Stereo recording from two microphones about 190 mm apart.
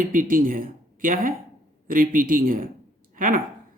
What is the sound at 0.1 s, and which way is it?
A man's voice, 45° right (ahead or behind).